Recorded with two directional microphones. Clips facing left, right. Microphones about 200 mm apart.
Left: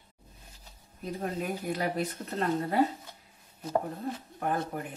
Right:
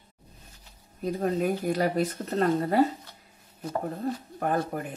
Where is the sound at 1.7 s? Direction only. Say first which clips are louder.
Right 5 dB; 40° right (ahead or behind).